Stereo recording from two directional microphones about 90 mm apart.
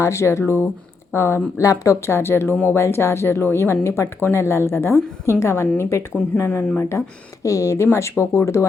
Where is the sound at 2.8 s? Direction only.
30° left (ahead or behind).